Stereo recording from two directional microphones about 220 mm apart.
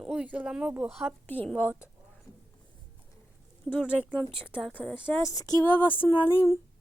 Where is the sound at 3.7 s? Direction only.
10° left (ahead or behind).